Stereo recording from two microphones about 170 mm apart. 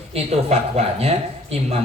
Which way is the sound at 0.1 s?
35° right (ahead or behind).